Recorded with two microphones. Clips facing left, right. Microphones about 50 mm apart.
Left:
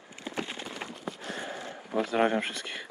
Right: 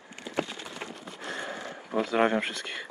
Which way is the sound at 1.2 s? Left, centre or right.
Right.